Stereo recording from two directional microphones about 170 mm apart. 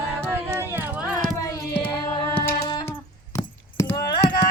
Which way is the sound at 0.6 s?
10° right (ahead or behind).